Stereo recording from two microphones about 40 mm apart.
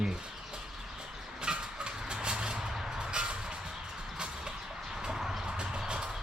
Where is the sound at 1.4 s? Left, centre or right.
Right.